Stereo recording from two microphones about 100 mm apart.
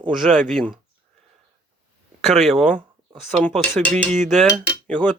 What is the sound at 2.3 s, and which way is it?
Speech, centre (ahead or behind).